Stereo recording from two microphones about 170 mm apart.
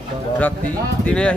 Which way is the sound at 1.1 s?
5° left (ahead or behind).